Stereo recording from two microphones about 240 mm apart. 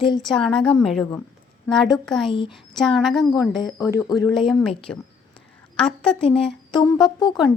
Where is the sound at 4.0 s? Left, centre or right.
Centre.